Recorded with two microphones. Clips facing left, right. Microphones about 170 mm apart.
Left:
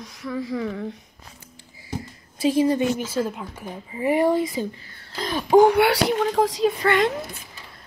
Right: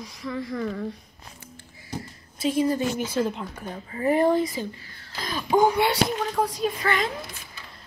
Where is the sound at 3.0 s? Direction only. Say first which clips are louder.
Even; 5° left (ahead or behind).